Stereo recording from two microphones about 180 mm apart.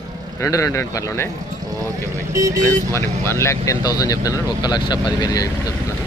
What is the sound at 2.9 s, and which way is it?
Speech, 15° left (ahead or behind).